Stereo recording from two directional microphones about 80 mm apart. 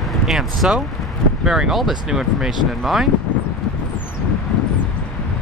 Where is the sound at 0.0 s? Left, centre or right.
Centre.